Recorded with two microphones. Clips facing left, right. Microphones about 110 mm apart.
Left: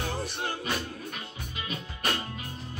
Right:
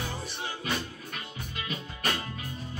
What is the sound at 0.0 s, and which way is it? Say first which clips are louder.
Music: left 4 dB; 60° left (ahead or behind).